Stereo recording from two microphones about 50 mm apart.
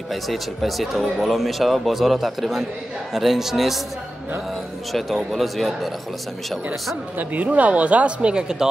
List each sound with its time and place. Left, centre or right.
0.1 s speech: centre
4.9 s speech: centre
7.2 s speech: right